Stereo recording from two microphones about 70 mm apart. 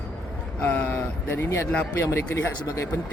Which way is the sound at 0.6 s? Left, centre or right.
Left.